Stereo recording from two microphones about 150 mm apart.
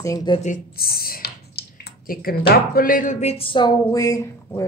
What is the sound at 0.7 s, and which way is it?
Speech, 90° left.